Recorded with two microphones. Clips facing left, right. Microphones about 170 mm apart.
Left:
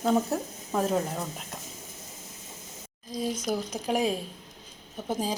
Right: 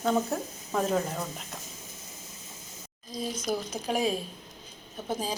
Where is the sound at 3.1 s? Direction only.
15° left (ahead or behind).